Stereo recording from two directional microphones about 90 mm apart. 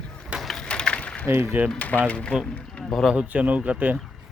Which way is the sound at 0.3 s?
5° left (ahead or behind).